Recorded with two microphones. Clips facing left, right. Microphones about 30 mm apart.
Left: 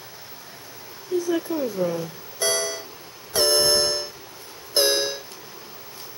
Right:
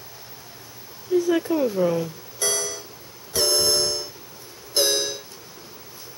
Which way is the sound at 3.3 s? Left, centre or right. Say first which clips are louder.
Left 2 dB; centre.